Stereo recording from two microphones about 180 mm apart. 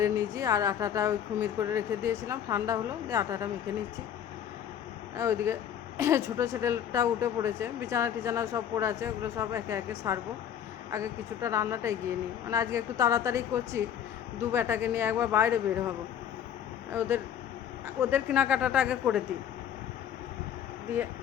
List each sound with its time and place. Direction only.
0.0 s speech: 20° right (ahead or behind)
5.1 s speech: 15° right (ahead or behind)
16.9 s speech: 10° right (ahead or behind)